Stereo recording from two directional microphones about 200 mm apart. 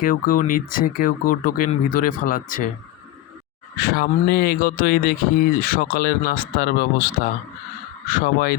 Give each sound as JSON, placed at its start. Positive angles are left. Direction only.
{"t": 0.0, "sound": "speech", "side_deg": 45}
{"t": 3.8, "sound": "speech", "side_deg": 50}